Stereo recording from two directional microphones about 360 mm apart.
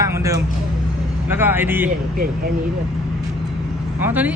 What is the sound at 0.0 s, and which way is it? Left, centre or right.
Music, centre.